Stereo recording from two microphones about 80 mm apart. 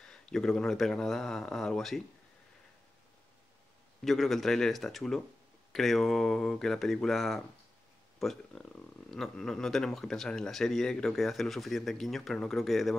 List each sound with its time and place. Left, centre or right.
0.0 s speech: centre
4.0 s speech: centre